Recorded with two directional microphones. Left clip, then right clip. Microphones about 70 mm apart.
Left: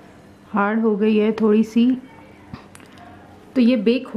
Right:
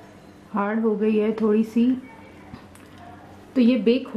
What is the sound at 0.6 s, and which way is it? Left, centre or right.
Speech, left.